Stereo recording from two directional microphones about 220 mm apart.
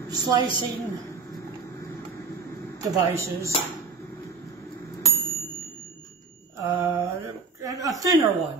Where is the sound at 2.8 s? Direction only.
15° right (ahead or behind).